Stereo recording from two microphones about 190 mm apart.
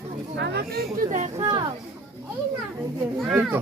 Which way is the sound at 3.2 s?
Centre (ahead or behind).